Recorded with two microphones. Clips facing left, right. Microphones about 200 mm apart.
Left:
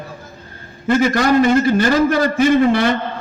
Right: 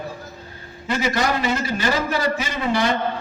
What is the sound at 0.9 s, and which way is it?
A man's voice, 50° left (ahead or behind).